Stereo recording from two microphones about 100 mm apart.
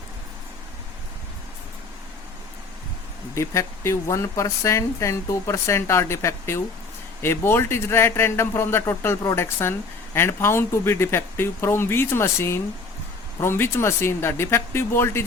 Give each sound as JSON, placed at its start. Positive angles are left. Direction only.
{"t": 3.3, "sound": "speech", "side_deg": 30}